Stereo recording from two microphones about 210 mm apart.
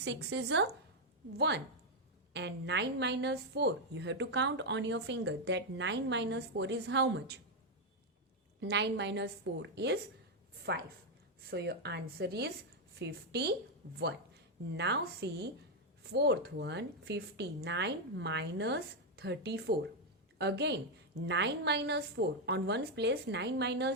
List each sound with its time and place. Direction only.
0.0 s a woman's voice: 55° right (ahead or behind)
8.6 s a woman's voice: 55° right (ahead or behind)